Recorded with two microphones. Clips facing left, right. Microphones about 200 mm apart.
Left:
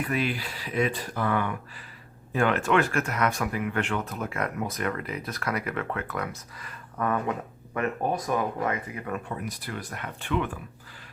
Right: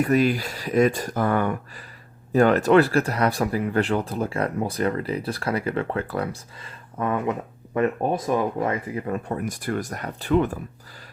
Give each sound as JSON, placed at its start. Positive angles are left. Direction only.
{"t": 0.0, "sound": "speech", "side_deg": -40}
{"t": 9.3, "sound": "speech", "side_deg": -50}